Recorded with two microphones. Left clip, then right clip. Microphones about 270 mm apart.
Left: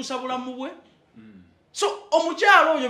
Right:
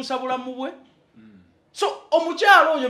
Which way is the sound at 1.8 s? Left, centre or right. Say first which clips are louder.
Right 1 dB; right.